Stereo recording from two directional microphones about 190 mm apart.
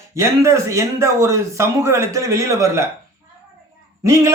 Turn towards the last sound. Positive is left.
turn(degrees=-15)  # may be behind; listen again after turning